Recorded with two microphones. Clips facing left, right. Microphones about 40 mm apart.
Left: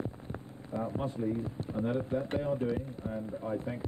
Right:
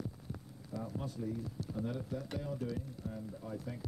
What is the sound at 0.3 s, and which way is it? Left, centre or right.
Speech, left.